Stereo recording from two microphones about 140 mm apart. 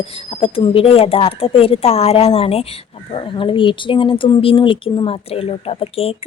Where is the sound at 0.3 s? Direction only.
40° left (ahead or behind).